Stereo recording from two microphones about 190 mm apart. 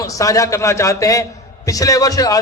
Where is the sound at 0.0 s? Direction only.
15° left (ahead or behind).